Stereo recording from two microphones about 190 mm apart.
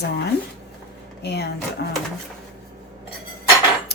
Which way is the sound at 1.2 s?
60° left (ahead or behind).